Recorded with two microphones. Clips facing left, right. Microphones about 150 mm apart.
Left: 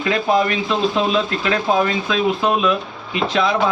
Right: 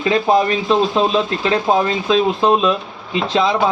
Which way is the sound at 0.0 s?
25° right (ahead or behind).